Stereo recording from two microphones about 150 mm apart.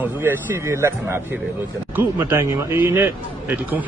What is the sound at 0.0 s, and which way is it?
Speech, 15° right (ahead or behind).